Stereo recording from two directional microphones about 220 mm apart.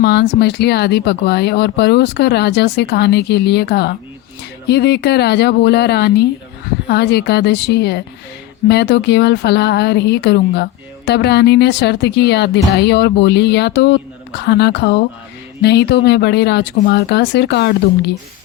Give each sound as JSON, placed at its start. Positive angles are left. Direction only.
{"t": 0.0, "sound": "speech", "side_deg": 50}